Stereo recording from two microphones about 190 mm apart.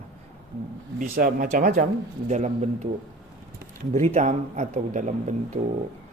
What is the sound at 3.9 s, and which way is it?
Speech, 35° right (ahead or behind).